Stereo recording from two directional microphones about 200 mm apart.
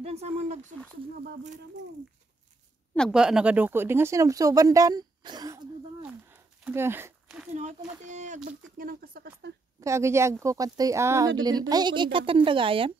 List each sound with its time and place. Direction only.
0.0 s speech: 30° right (ahead or behind)
2.9 s speech: centre (ahead or behind); by 5.6 s 20° right (ahead or behind)
6.2 s a sound: 10° right (ahead or behind)
7.5 s speech: 35° right (ahead or behind)
9.8 s speech: 15° right (ahead or behind)